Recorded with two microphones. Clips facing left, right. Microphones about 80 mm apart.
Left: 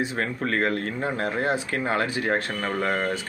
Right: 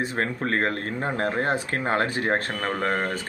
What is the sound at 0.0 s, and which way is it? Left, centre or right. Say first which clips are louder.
Speech: even; right.